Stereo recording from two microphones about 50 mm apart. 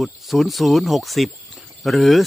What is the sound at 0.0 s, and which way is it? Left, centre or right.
Speech, centre.